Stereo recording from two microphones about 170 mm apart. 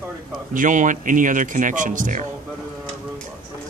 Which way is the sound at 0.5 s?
50° right (ahead or behind).